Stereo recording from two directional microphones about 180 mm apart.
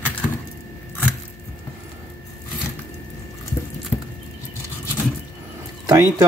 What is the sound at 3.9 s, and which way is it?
Patter, 5° left (ahead or behind).